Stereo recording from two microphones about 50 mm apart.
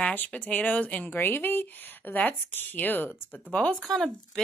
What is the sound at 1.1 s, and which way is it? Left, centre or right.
A woman's voice, left.